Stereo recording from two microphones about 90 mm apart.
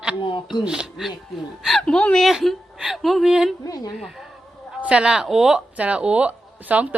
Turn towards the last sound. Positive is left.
turn(degrees=-15)  # may be behind; listen again after turning